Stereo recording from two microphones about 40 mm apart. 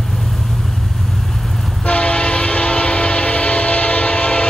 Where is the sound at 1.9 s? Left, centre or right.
Left.